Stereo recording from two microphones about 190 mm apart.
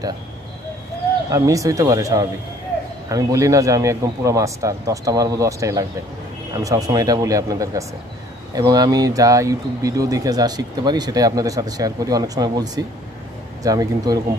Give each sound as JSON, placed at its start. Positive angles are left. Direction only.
{"t": 1.3, "sound": "a man's voice", "side_deg": -15}